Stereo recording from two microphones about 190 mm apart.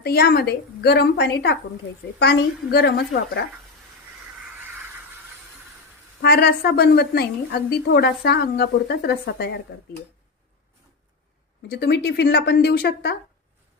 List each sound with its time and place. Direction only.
0.0 s a woman's voice: 55° left (ahead or behind)
6.2 s a woman's voice: 55° left (ahead or behind)
11.7 s a woman's voice: 65° left (ahead or behind)